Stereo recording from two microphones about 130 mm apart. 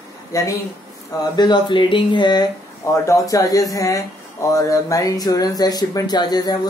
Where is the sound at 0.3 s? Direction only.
25° left (ahead or behind).